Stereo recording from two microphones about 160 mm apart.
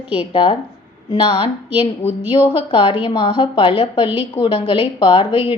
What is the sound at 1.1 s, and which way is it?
Speech, 35° left (ahead or behind).